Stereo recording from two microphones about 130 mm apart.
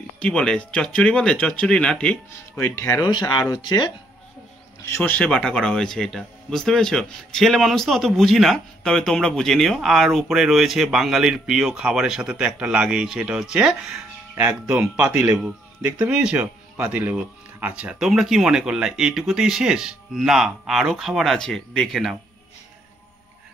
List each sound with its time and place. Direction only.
0.2 s speech: 5° left (ahead or behind)
2.5 s speech: 20° left (ahead or behind)
3.0 s speech: 35° left (ahead or behind)
4.8 s speech: 15° left (ahead or behind)